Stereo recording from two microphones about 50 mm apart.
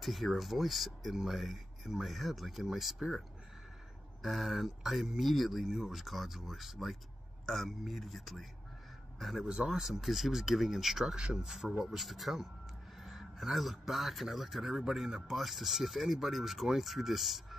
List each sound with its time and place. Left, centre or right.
0.0 s a man's voice: centre
4.2 s a man's voice: centre
11.1 s a man's voice: right
11.4 s a man's voice: centre